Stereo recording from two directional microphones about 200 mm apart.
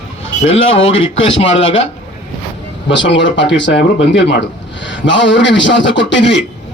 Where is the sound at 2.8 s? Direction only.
65° left (ahead or behind).